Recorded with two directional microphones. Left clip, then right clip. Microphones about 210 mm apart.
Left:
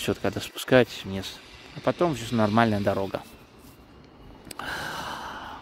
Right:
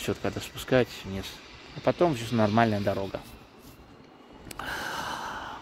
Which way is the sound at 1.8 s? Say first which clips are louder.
Even; 10° left (ahead or behind).